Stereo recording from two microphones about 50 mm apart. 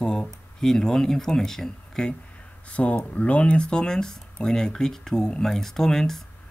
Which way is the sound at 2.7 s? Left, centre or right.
Left.